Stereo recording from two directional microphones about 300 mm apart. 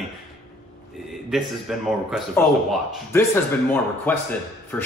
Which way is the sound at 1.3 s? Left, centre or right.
Centre.